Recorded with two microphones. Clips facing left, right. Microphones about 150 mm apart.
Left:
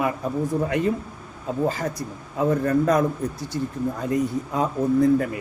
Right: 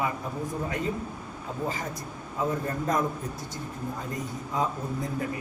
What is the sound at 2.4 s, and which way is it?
Speech, 75° left (ahead or behind).